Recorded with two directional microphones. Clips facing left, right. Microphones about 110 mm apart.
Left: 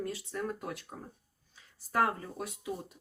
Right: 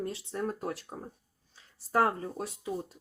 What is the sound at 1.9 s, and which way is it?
Speech, 30° right (ahead or behind).